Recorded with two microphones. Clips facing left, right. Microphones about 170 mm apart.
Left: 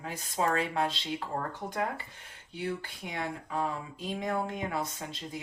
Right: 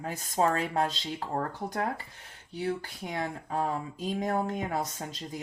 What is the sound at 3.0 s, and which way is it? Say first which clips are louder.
Speech: right 3 dB; 40° right (ahead or behind).